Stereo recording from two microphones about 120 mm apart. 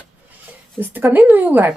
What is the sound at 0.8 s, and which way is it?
Speech, 20° right (ahead or behind).